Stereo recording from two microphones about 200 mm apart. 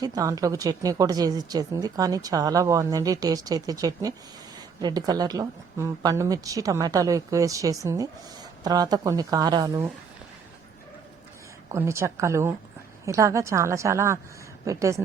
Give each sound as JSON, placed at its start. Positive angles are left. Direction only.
{"t": 0.0, "sound": "speech", "side_deg": -20}
{"t": 11.7, "sound": "speech", "side_deg": -15}